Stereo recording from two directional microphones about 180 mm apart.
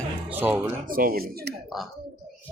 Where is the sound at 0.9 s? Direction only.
50° right (ahead or behind).